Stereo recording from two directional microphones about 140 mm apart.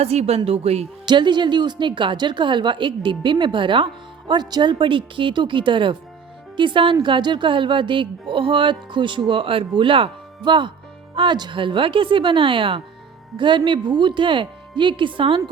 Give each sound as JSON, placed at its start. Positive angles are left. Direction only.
{"t": 0.0, "sound": "a woman's voice", "side_deg": -45}
{"t": 1.0, "sound": "speech", "side_deg": -35}